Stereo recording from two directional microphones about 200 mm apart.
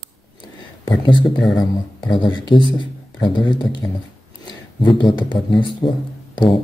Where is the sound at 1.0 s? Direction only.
25° left (ahead or behind).